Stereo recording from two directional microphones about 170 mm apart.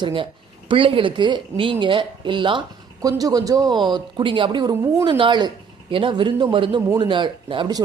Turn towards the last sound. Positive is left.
turn(degrees=-25)  # may be behind; listen again after turning